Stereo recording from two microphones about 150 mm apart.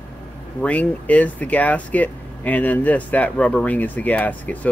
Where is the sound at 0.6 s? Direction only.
10° left (ahead or behind).